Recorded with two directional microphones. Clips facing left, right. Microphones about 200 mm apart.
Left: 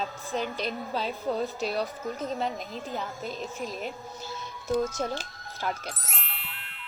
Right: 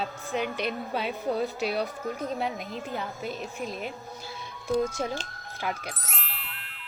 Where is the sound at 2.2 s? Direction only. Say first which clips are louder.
Even; 10° right (ahead or behind).